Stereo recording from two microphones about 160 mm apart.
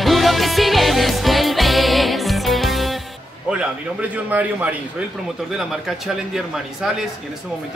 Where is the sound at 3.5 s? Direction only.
5° right (ahead or behind).